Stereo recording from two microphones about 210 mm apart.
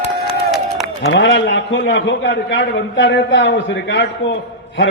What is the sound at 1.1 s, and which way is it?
A man's voice, 65° left (ahead or behind).